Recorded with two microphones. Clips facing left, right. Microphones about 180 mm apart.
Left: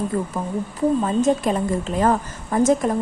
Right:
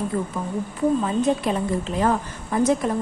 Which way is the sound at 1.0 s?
45° left (ahead or behind).